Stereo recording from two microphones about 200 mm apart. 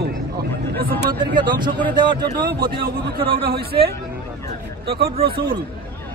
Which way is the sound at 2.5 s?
50° right (ahead or behind).